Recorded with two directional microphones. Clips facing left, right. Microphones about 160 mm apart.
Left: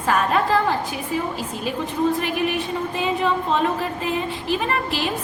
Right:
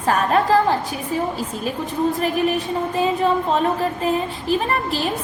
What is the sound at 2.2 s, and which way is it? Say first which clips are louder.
A woman's voice: right 3 dB; 40° right (ahead or behind).